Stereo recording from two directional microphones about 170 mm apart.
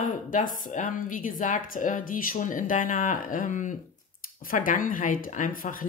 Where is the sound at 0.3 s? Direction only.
50° left (ahead or behind).